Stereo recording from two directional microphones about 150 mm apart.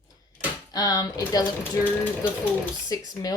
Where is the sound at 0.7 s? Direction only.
25° left (ahead or behind).